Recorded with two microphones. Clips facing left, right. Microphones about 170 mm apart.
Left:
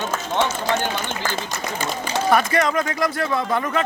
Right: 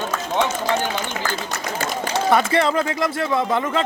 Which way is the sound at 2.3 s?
30° right (ahead or behind).